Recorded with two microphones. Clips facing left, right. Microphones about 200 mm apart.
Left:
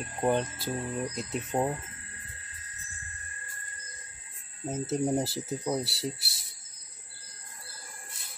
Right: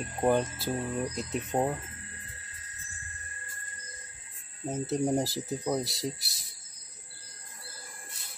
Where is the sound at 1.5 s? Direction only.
25° right (ahead or behind).